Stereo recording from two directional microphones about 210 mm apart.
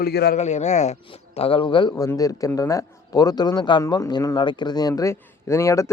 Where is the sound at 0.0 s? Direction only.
50° left (ahead or behind).